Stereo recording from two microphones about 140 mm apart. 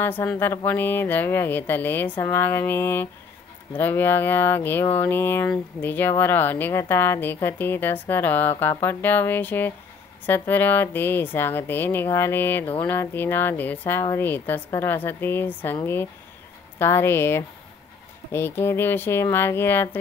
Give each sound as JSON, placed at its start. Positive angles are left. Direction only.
{"t": 0.0, "sound": "speech", "side_deg": 15}